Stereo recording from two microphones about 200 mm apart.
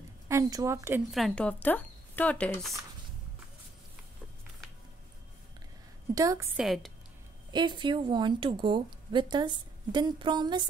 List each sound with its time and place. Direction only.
0.3 s a woman's voice: 15° right (ahead or behind)
1.1 s speech: 5° left (ahead or behind)
6.1 s a woman's voice: 15° right (ahead or behind)
6.5 s a woman's voice: centre (ahead or behind)
7.5 s a woman's voice: 20° right (ahead or behind)